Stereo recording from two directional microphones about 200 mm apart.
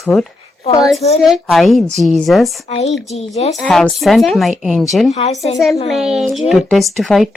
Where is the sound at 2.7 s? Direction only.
30° left (ahead or behind).